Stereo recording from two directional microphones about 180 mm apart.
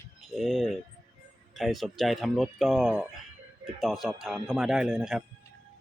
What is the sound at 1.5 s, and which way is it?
Speech, centre (ahead or behind).